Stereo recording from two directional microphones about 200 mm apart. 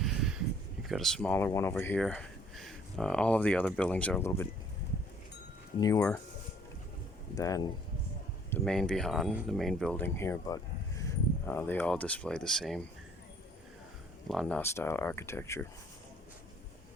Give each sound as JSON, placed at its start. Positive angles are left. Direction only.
{"t": 0.0, "sound": "a sound", "side_deg": 0}
{"t": 0.9, "sound": "speech", "side_deg": 0}
{"t": 5.8, "sound": "speech", "side_deg": 15}
{"t": 7.3, "sound": "speech", "side_deg": 15}
{"t": 8.4, "sound": "speech", "side_deg": 5}
{"t": 14.3, "sound": "speech", "side_deg": 5}